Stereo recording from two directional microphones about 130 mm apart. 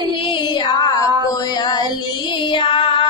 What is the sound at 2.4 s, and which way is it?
Music, 40° left (ahead or behind).